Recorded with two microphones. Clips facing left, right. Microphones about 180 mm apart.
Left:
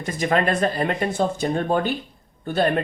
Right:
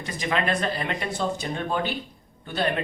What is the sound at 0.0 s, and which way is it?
A man's voice, 45° left (ahead or behind).